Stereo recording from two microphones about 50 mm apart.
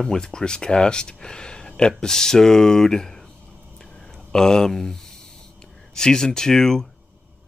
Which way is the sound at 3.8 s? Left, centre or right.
Centre.